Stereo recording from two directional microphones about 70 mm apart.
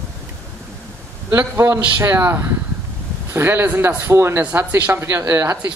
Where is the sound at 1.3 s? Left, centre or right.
Right.